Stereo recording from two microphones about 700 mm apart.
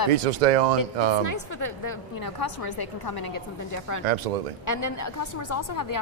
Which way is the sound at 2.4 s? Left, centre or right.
Left.